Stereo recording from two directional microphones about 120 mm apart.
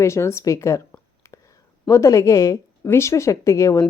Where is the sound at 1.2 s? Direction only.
25° left (ahead or behind).